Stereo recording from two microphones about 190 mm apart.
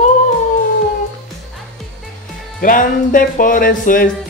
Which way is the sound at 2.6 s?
45° left (ahead or behind).